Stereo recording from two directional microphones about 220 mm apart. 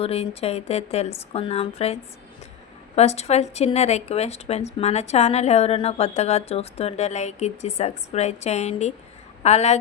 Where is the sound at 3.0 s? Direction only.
30° left (ahead or behind).